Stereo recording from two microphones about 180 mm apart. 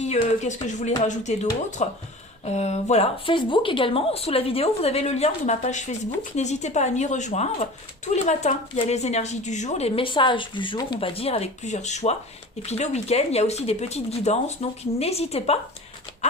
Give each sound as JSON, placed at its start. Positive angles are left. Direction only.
{"t": 0.0, "sound": "speech", "side_deg": 40}